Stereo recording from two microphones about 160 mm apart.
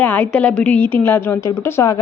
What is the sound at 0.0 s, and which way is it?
A woman's voice, 10° left (ahead or behind).